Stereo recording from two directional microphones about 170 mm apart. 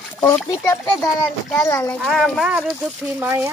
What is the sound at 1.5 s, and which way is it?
Speech, 15° left (ahead or behind).